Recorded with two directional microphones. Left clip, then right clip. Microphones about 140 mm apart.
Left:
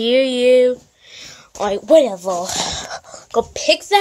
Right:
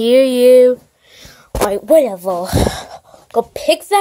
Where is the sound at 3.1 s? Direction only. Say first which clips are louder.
Left 4 dB; 35° left (ahead or behind).